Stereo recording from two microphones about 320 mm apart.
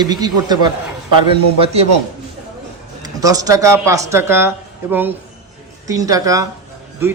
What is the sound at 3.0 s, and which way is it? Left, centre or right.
Speech, centre.